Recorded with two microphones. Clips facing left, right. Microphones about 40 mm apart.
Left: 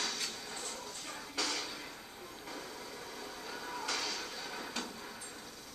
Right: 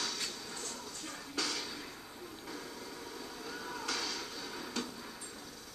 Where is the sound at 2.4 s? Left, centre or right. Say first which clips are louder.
Left 1 dB; centre.